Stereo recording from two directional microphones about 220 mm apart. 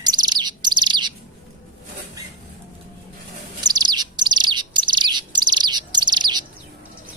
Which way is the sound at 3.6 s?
20° right (ahead or behind).